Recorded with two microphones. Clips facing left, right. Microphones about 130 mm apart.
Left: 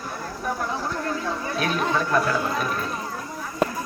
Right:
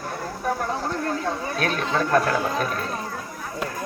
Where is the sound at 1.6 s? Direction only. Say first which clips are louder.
Even; 50° right (ahead or behind).